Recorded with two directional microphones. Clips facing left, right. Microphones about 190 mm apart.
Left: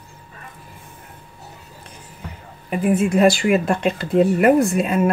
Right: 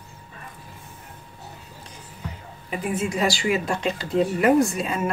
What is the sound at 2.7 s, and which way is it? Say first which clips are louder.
Speech: left 8 dB; 55° left (ahead or behind).